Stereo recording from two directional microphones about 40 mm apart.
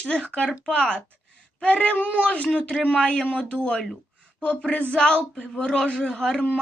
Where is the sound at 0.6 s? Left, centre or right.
Left.